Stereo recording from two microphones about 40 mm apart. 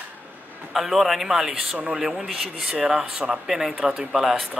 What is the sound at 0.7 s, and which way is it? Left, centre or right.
Speech, centre.